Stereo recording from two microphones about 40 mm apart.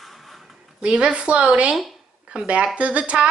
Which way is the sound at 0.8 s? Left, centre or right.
Right.